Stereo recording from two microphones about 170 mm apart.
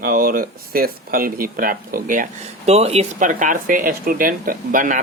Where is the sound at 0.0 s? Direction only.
60° right (ahead or behind).